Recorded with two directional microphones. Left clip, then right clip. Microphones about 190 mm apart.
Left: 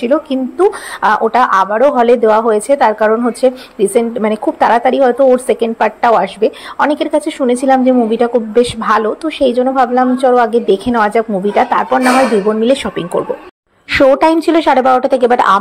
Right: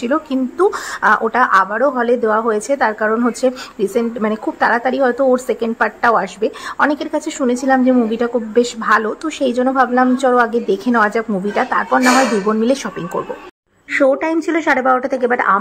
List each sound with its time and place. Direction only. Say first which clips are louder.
0.0 s a woman's voice: left 5 dB; centre (ahead or behind)
13.9 s a woman's voice: left 6 dB; 20° left (ahead or behind)